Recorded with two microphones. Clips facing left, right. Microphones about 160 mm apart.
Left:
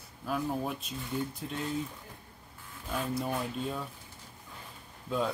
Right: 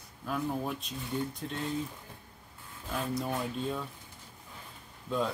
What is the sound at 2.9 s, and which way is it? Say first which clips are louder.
Speech: even; centre (ahead or behind).